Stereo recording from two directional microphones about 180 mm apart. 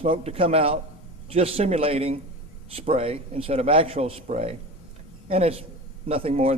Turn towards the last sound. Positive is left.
turn(degrees=-35)  # may be behind; listen again after turning